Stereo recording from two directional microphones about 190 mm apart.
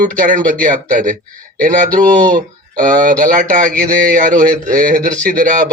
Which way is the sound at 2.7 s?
45° right (ahead or behind).